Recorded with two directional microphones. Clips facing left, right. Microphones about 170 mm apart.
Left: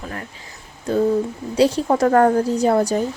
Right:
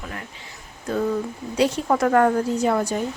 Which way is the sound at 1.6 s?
30° left (ahead or behind).